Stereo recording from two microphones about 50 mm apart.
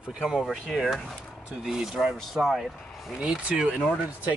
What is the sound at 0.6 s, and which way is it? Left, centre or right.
Speech, centre.